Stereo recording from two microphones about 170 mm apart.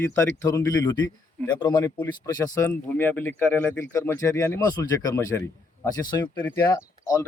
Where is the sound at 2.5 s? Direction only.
15° left (ahead or behind).